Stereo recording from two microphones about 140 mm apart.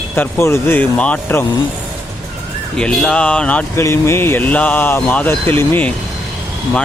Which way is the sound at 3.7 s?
20° left (ahead or behind).